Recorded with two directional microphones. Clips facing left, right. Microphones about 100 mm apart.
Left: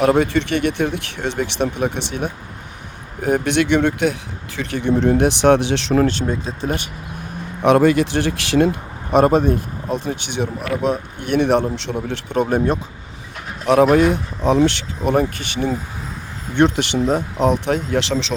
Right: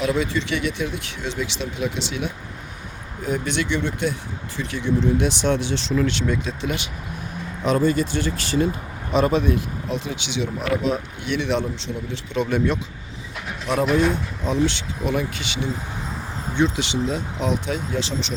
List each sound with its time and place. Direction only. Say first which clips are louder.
0.0 s speech: left 7 dB; 60° left (ahead or behind)
6.1 s speech: left 2 dB; 40° left (ahead or behind)
7.6 s speech: left 6 dB; 80° left
9.1 s speech: left 5 dB; 50° left (ahead or behind)
13.9 s speech: left 5 dB; 65° left (ahead or behind)
15.1 s speech: left 9 dB; 50° left (ahead or behind)
16.6 s speech: left 6 dB; 60° left (ahead or behind); by 18.3 s 90° left